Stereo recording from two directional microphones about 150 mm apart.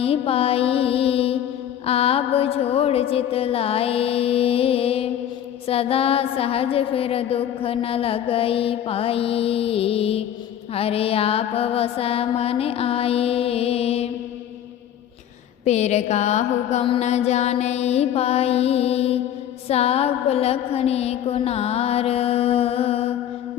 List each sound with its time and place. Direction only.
0.0 s music: 40° left (ahead or behind)
15.6 s mantra: 50° left (ahead or behind)